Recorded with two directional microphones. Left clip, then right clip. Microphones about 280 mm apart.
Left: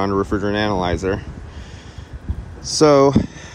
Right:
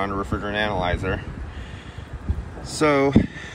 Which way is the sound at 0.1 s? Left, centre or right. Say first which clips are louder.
Left 6 dB; left.